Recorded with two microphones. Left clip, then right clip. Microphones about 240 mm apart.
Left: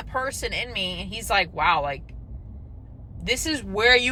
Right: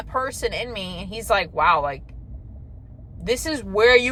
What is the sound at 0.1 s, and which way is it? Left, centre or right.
Speech, centre.